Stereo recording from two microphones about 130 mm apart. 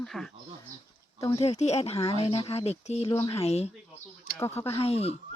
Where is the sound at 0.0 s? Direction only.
5° left (ahead or behind).